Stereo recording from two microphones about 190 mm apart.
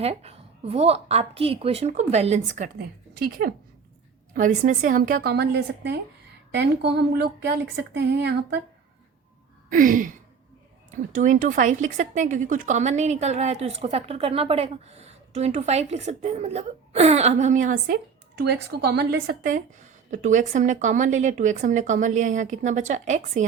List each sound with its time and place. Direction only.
0.0 s a woman's voice: 35° right (ahead or behind); by 8.6 s 65° right (ahead or behind)
9.6 s a sound: 45° right (ahead or behind)
10.9 s speech: 40° right (ahead or behind)